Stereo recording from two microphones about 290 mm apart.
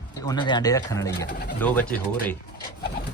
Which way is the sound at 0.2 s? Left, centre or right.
Centre.